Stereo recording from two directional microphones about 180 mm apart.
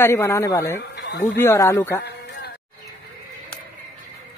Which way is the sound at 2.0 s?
70° left (ahead or behind).